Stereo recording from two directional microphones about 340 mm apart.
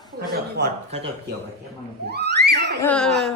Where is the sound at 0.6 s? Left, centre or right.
Right.